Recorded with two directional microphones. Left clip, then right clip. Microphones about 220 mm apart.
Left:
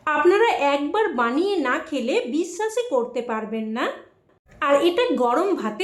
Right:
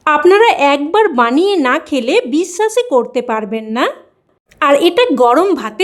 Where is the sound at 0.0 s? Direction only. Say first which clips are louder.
Right 9 dB; 50° right (ahead or behind).